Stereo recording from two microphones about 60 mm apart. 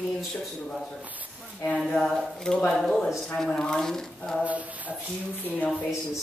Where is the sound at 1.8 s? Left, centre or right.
Centre.